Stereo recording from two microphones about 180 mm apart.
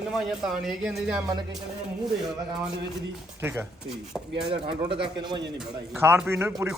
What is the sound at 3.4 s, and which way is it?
Speech, 15° right (ahead or behind).